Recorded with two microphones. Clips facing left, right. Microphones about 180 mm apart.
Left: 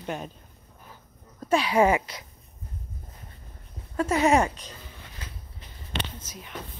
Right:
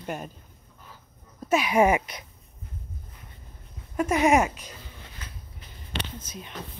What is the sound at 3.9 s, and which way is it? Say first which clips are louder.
Speech: even; 15° right (ahead or behind).